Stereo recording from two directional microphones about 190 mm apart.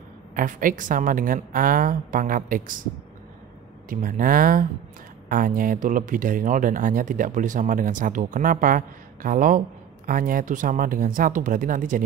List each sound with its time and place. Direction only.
0.4 s speech: 45° right (ahead or behind)
3.9 s speech: 45° right (ahead or behind)